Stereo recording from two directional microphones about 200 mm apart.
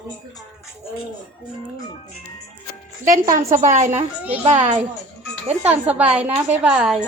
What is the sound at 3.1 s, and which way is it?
Speech, 40° right (ahead or behind).